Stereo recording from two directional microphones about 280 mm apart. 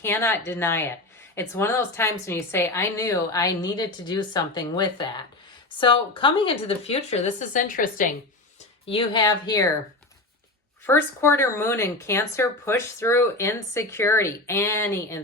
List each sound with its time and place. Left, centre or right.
0.0 s speech: centre; by 8.0 s left
8.9 s speech: centre
10.8 s speech: centre